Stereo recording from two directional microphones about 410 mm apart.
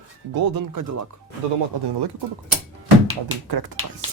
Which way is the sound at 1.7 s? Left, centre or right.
Right.